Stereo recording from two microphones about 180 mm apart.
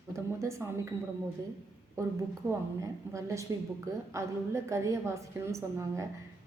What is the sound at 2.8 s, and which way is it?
A woman's voice, 15° right (ahead or behind).